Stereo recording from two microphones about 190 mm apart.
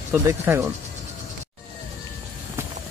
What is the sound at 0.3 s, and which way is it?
Speech, 15° right (ahead or behind).